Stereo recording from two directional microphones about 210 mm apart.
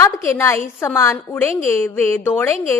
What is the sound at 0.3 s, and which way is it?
A woman's voice, 10° left (ahead or behind).